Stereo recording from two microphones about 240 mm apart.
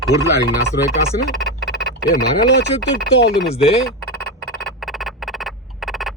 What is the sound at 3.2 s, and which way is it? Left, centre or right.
Speech, left.